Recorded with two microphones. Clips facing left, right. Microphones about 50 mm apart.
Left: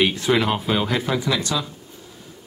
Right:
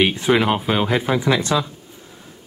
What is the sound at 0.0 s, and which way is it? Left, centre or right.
Speech, right.